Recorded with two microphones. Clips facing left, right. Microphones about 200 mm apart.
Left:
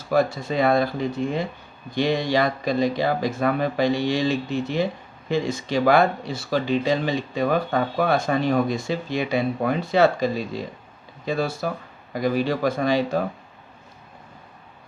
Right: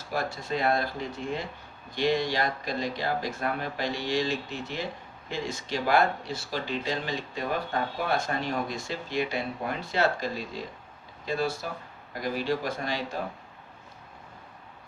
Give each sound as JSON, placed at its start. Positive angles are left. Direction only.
{"t": 0.1, "sound": "speech", "side_deg": 60}